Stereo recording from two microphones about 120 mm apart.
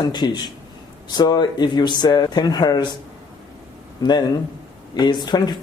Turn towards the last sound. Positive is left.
turn(degrees=35)  # may be behind; listen again after turning